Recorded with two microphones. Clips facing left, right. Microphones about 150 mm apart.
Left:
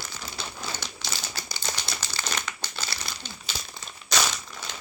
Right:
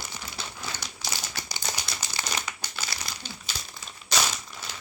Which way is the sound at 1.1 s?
15° right (ahead or behind).